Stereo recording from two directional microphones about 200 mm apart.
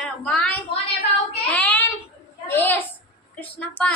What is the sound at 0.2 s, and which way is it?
Speech, 5° left (ahead or behind).